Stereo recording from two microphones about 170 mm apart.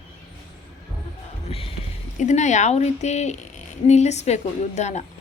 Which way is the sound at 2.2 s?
45° left (ahead or behind).